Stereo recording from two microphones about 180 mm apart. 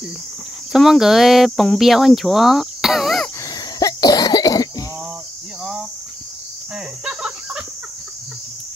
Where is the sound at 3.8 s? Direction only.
20° left (ahead or behind).